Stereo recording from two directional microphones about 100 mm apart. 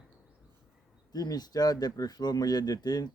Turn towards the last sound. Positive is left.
turn(degrees=40)  # may be behind; listen again after turning